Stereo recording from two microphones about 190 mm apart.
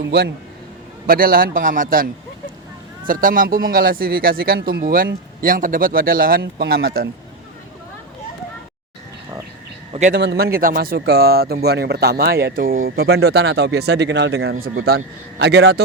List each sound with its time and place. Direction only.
0.0 s speech: 55° right (ahead or behind)
3.1 s speech: 45° right (ahead or behind)
10.1 s speech: 60° right (ahead or behind)